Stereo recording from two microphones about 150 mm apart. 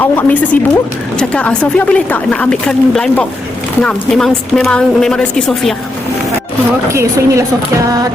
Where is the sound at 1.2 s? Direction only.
10° left (ahead or behind).